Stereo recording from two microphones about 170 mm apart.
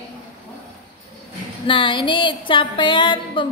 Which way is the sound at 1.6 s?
30° left (ahead or behind).